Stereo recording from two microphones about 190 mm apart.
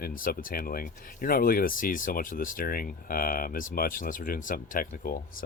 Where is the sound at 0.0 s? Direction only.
50° left (ahead or behind).